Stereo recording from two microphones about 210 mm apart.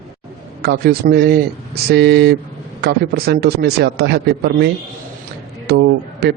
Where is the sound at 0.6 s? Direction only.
50° right (ahead or behind).